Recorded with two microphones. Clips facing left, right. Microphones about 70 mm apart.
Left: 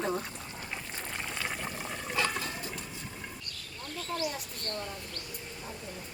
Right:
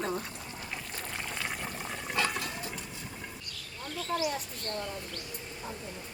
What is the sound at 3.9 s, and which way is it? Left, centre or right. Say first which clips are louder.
Mouse: right 3 dB; left.